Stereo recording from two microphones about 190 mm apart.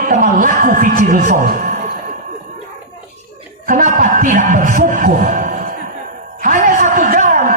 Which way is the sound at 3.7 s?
45° right (ahead or behind).